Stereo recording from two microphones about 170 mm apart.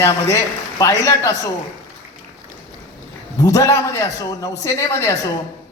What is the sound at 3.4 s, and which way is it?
A man's voice, 20° left (ahead or behind).